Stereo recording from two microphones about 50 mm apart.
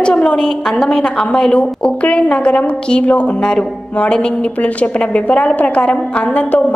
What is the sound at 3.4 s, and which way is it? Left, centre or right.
A woman's voice, left.